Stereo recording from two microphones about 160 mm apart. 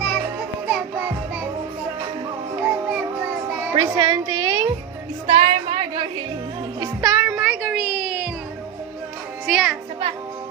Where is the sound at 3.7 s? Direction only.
30° right (ahead or behind).